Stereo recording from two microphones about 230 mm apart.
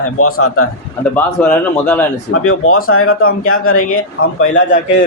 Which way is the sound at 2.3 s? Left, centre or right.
Left.